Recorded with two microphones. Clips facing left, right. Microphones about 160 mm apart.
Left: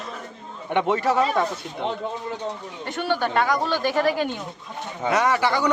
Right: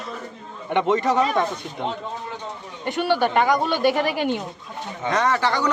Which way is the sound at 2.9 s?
10° right (ahead or behind).